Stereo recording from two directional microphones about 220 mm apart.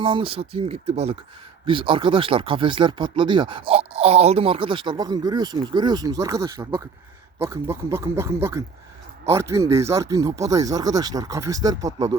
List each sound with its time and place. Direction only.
0.0 s speech: 25° right (ahead or behind)
11.9 s speech: 30° right (ahead or behind)